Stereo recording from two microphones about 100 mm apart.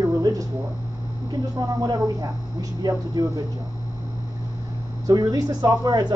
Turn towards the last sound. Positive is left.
turn(degrees=-45)  # may be behind; listen again after turning